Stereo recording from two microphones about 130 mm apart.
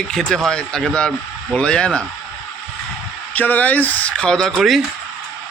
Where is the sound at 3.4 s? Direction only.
15° left (ahead or behind).